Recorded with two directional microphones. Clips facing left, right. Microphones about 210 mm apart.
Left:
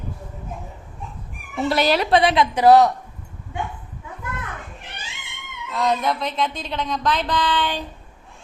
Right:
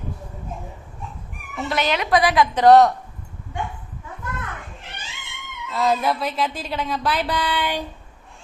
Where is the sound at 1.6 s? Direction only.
35° left (ahead or behind).